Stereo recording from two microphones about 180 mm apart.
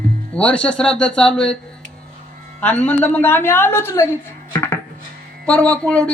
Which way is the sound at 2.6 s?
5° left (ahead or behind).